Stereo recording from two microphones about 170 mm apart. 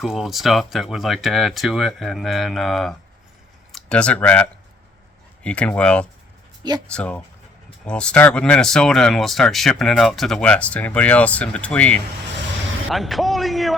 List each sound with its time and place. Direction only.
0.0 s speech: centre (ahead or behind)
6.6 s speech: 25° right (ahead or behind)
6.8 s speech: 5° left (ahead or behind)